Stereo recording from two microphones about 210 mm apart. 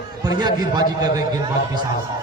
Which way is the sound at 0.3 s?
20° right (ahead or behind).